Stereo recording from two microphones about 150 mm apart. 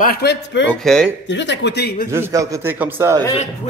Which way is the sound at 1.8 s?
90° left.